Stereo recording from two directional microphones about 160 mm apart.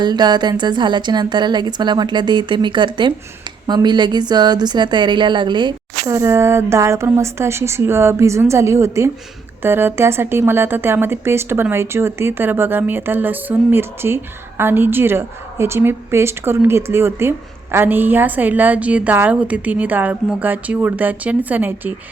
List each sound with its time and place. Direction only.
0.0 s a woman's voice: 25° right (ahead or behind)
6.1 s a woman's voice: 15° right (ahead or behind)